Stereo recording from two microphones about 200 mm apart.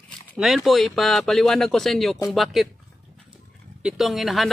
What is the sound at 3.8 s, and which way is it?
Speech, centre (ahead or behind).